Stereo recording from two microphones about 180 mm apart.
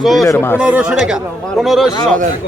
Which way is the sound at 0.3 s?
10° left (ahead or behind).